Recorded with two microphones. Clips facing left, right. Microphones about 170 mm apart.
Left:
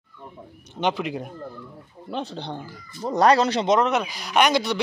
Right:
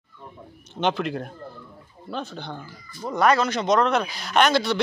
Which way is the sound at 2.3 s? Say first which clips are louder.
Left 3 dB; 30° left (ahead or behind).